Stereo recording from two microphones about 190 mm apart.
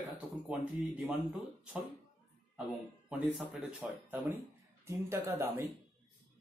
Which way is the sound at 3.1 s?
10° right (ahead or behind).